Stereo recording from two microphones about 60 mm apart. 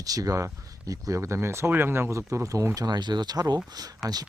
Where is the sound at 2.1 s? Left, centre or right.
Right.